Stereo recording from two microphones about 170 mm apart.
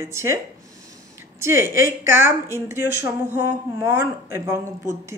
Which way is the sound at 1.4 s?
15° right (ahead or behind).